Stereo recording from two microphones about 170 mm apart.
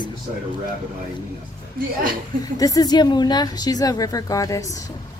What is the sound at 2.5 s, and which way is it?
A woman's voice, 20° left (ahead or behind).